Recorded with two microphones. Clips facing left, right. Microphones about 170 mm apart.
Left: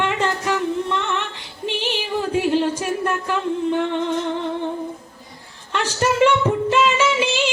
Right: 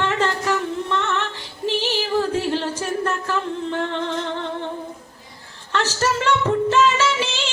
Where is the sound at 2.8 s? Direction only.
15° left (ahead or behind).